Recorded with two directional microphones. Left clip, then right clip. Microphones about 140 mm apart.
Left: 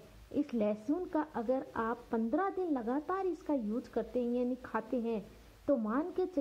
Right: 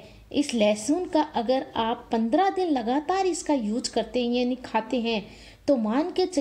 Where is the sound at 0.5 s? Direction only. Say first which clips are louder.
Right 13 dB; 25° right (ahead or behind).